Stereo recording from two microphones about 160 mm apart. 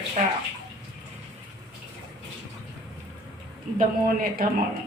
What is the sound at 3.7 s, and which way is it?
Speech, 60° right (ahead or behind).